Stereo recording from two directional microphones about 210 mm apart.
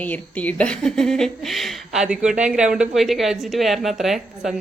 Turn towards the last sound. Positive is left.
turn(degrees=0)  # may be behind; listen again after turning